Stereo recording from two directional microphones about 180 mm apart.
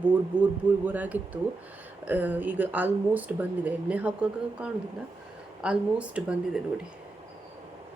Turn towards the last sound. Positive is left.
turn(degrees=-5)  # may be behind; listen again after turning